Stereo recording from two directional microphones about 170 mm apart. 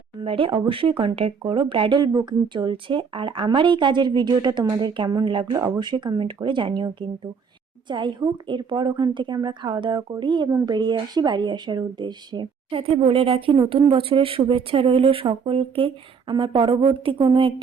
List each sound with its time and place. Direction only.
0.2 s a woman's voice: 30° right (ahead or behind)